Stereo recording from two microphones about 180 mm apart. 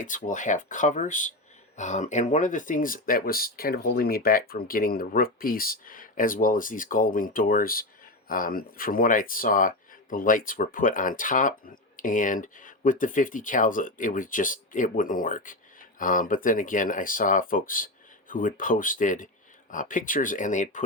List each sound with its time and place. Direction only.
0.0 s speech: 45° left (ahead or behind)